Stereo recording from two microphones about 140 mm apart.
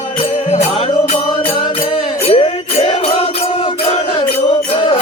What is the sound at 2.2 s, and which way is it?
Music, 40° left (ahead or behind).